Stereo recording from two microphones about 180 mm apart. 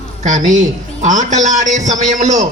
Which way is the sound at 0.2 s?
40° right (ahead or behind).